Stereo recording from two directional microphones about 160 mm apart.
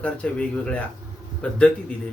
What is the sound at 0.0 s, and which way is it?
Speech, 10° left (ahead or behind).